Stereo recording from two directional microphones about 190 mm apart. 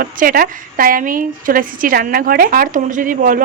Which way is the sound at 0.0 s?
50° right (ahead or behind).